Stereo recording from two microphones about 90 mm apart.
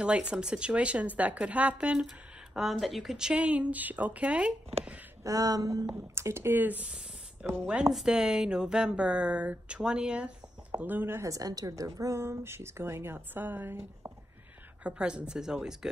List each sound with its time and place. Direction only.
0.0 s speech: 10° right (ahead or behind)
5.2 s a sound: 45° right (ahead or behind)
5.9 s speech: 30° right (ahead or behind)
11.2 s speech: 40° right (ahead or behind)
14.8 s speech: 10° right (ahead or behind)